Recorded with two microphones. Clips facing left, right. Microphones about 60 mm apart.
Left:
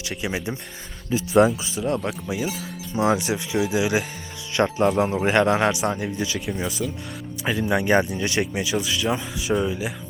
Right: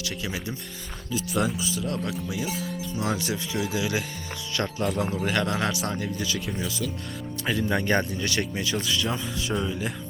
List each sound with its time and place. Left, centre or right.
0.0 s speech: left
7.7 s speech: centre